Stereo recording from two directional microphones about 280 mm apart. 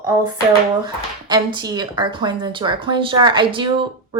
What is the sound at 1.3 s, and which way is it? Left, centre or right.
Speech, centre.